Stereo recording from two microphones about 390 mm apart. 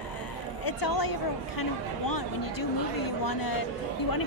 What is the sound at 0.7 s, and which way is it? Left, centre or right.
A woman's voice, left.